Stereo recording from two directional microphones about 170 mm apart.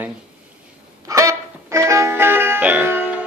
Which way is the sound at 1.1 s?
20° right (ahead or behind).